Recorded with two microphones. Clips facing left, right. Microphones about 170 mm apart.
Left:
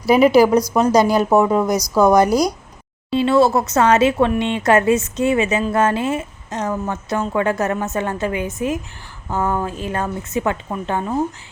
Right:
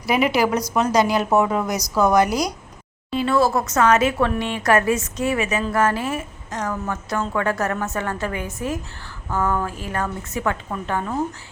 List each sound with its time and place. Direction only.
0.0 s a woman's voice: 35° left (ahead or behind)
3.1 s speech: 25° left (ahead or behind)